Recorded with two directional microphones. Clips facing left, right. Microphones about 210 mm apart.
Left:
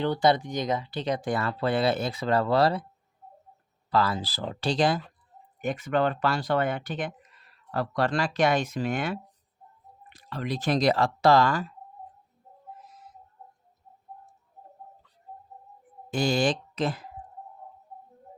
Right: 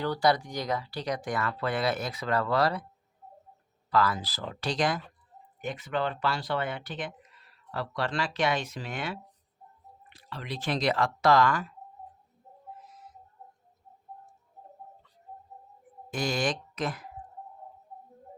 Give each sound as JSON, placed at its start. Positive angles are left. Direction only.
{"t": 0.0, "sound": "speech", "side_deg": 25}
{"t": 3.9, "sound": "speech", "side_deg": 30}
{"t": 5.6, "sound": "speech", "side_deg": 45}
{"t": 16.0, "sound": "speech", "side_deg": 30}